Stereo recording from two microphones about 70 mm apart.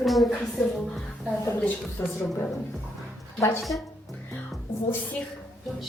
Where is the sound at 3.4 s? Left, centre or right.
Left.